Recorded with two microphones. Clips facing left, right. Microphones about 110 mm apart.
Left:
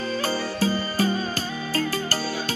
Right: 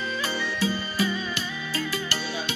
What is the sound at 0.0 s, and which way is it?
Music, 40° left (ahead or behind).